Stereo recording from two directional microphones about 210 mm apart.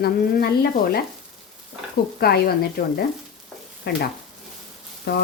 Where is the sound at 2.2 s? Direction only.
45° left (ahead or behind).